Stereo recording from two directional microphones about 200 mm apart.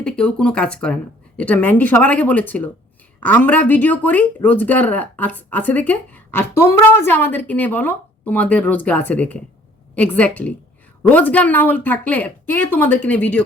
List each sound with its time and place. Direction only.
0.0 s speech: 5° left (ahead or behind)